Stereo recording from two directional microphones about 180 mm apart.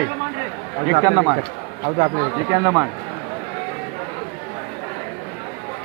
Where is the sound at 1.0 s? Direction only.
20° right (ahead or behind).